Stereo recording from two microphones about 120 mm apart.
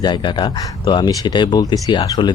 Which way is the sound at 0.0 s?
40° left (ahead or behind).